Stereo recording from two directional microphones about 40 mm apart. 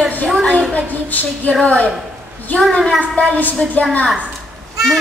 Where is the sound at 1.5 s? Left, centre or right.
Left.